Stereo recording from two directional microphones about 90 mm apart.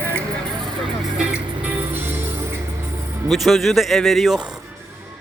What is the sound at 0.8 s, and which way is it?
Vehicle, centre (ahead or behind).